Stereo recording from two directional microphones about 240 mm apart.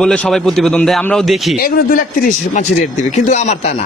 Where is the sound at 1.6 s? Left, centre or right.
Left.